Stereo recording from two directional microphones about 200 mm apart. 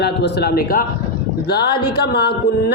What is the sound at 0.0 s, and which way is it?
A man's voice, 55° left (ahead or behind).